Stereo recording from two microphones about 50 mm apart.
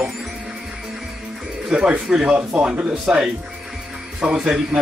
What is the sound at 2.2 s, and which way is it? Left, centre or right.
Speech, centre.